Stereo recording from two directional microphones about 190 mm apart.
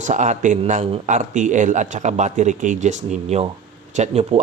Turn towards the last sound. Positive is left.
turn(degrees=-35)  # may be behind; listen again after turning